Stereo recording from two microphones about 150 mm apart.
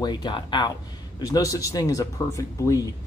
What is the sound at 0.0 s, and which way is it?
Speech, 30° left (ahead or behind).